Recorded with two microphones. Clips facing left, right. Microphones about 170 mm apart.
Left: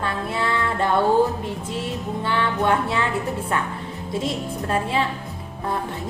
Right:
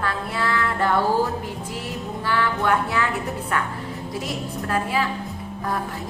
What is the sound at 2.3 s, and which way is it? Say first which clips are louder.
Music: even; 25° left (ahead or behind).